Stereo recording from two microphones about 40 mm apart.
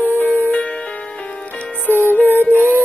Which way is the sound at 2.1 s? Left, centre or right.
Left.